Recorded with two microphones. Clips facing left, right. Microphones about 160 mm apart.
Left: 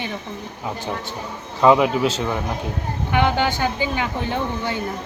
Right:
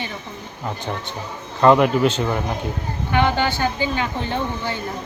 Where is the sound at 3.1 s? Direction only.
15° left (ahead or behind).